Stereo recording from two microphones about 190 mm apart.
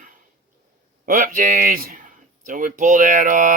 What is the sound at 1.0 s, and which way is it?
Speech, 45° right (ahead or behind).